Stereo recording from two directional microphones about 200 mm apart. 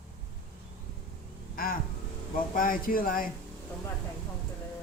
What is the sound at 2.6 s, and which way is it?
Speech, 45° left (ahead or behind).